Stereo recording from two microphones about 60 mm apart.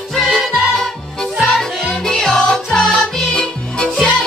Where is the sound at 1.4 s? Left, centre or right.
Centre.